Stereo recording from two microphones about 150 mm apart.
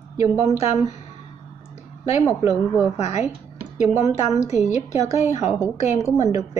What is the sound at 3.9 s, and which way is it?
Speech, 15° right (ahead or behind).